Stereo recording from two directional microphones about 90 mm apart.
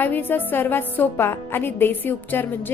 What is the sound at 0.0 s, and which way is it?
A woman's voice, 20° left (ahead or behind).